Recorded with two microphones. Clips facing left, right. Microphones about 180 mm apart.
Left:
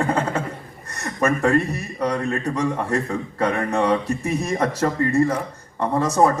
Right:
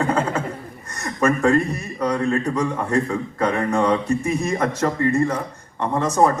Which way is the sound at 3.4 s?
35° left (ahead or behind).